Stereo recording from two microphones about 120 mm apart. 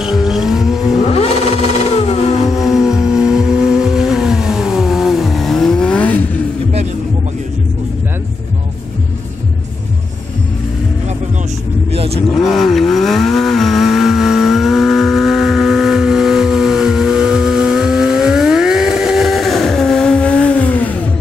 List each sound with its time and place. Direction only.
0.0 s vehicle: 5° right (ahead or behind)
1.0 s vehicle: 60° left (ahead or behind)
2.6 s vehicle: 5° right (ahead or behind); by 6.2 s 10° left (ahead or behind)
11.9 s vehicle: 55° right (ahead or behind)
12.4 s vehicle: centre (ahead or behind)